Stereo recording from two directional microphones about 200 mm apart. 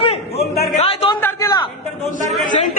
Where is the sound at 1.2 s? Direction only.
20° left (ahead or behind).